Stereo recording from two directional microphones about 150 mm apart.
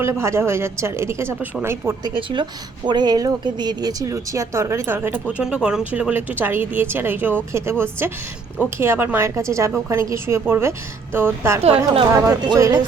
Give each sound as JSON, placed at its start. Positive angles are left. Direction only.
{"t": 0.0, "sound": "speech", "side_deg": -20}
{"t": 2.0, "sound": "a woman's voice", "side_deg": -30}